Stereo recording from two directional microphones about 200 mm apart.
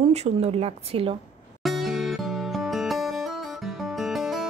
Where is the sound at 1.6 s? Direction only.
Centre (ahead or behind).